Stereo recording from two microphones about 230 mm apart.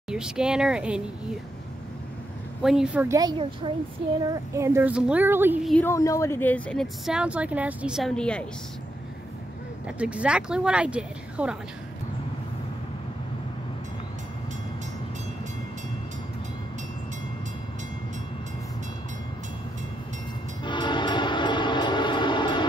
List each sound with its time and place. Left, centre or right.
0.1 s speech: centre
2.6 s a woman's voice: centre
9.8 s speech: centre
20.6 s train: centre